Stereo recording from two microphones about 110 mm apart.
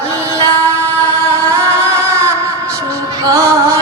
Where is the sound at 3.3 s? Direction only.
30° right (ahead or behind).